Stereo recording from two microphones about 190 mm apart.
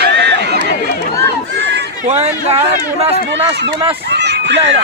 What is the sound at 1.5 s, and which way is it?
Run, 65° right (ahead or behind).